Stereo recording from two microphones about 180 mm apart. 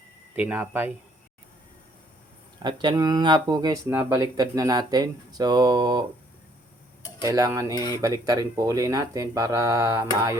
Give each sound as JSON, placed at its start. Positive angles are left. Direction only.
{"t": 0.3, "sound": "speech", "side_deg": -10}
{"t": 2.6, "sound": "speech", "side_deg": -25}
{"t": 7.2, "sound": "speech", "side_deg": -20}